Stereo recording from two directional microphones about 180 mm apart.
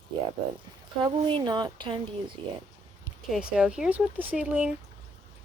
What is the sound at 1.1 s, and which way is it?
Speech, 30° right (ahead or behind).